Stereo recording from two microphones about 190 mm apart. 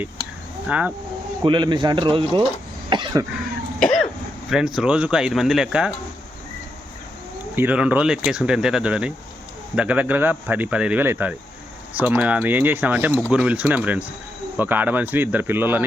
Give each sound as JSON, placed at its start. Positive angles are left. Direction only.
{"t": 0.7, "sound": "speech", "side_deg": -5}
{"t": 1.5, "sound": "speech", "side_deg": -25}
{"t": 2.9, "sound": "cough", "side_deg": -25}
{"t": 3.8, "sound": "cough", "side_deg": 5}
{"t": 4.4, "sound": "speech", "side_deg": 0}
{"t": 7.5, "sound": "speech", "side_deg": -10}